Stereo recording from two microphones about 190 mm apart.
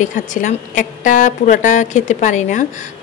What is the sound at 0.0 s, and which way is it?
A woman's voice, 40° left (ahead or behind).